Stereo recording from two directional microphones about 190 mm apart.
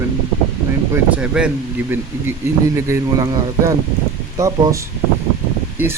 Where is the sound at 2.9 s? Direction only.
20° right (ahead or behind).